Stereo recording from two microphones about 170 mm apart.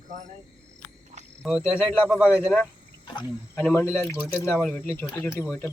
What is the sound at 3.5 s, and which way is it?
Speech, 10° left (ahead or behind).